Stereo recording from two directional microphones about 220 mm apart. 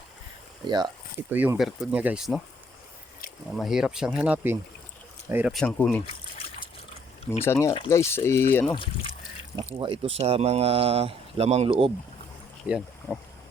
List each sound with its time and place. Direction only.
0.6 s speech: 20° right (ahead or behind)
1.3 s speech: 10° right (ahead or behind)
3.6 s speech: centre (ahead or behind)
7.4 s speech: 10° left (ahead or behind)
8.7 s speech: 25° left (ahead or behind)
9.7 s speech: 20° right (ahead or behind)
12.6 s speech: 5° right (ahead or behind)